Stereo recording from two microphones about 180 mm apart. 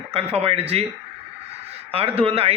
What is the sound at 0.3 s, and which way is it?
Speech, 35° right (ahead or behind).